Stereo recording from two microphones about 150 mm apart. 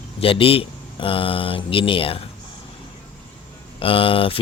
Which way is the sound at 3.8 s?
35° left (ahead or behind).